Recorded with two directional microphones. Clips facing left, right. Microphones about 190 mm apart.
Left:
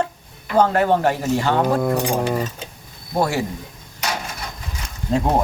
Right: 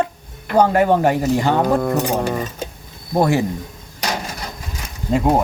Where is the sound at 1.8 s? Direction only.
Centre (ahead or behind).